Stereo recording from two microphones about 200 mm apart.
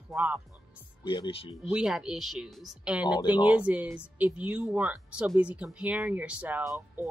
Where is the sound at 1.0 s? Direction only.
25° left (ahead or behind).